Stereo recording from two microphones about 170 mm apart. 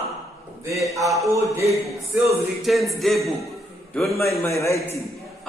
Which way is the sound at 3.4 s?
Centre (ahead or behind).